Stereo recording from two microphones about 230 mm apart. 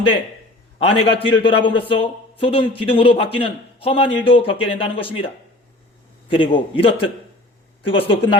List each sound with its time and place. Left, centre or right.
0.9 s a man's voice: left
6.3 s a man's voice: left